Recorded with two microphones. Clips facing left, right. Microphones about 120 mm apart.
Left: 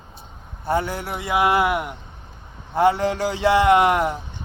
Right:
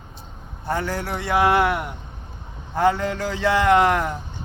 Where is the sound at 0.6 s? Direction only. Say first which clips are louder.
Left 2 dB; 25° left (ahead or behind).